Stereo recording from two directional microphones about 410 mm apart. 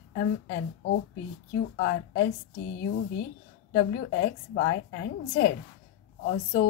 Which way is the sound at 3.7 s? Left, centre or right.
Left.